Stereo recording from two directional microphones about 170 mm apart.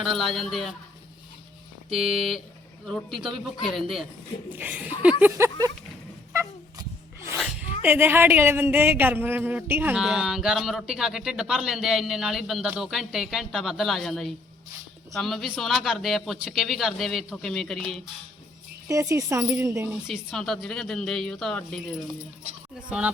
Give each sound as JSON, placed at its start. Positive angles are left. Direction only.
{"t": 0.0, "sound": "speech", "side_deg": 0}
{"t": 1.9, "sound": "speech", "side_deg": 0}
{"t": 5.2, "sound": "speech", "side_deg": -15}
{"t": 7.8, "sound": "speech", "side_deg": -10}
{"t": 18.9, "sound": "speech", "side_deg": -15}
{"t": 19.9, "sound": "speech", "side_deg": 0}